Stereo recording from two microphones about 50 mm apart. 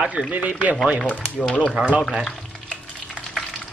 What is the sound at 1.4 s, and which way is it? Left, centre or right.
Speech, centre.